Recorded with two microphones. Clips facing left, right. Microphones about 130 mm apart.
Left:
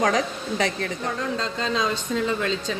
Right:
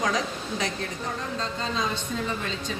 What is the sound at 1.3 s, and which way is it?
Speech, 90° left.